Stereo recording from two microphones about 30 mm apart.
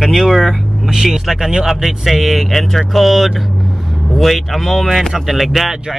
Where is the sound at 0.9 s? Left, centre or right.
Centre.